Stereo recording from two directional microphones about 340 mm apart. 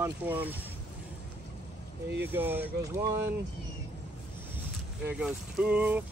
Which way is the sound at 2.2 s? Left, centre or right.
Centre.